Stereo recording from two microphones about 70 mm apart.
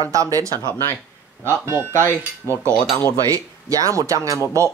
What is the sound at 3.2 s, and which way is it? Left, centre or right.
Speech, right.